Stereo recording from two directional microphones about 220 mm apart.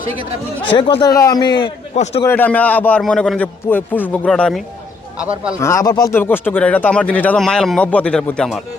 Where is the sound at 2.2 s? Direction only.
10° left (ahead or behind).